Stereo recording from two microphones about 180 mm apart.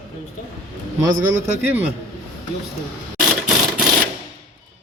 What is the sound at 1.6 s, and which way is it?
Speech, 10° right (ahead or behind).